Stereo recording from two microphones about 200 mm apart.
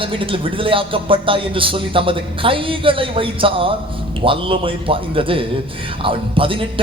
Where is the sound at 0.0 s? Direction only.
25° right (ahead or behind).